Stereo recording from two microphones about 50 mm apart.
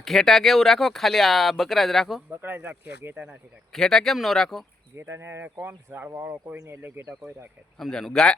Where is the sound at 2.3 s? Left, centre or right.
Right.